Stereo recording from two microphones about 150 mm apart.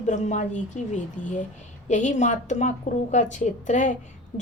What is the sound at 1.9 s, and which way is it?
A woman's voice, 55° left (ahead or behind).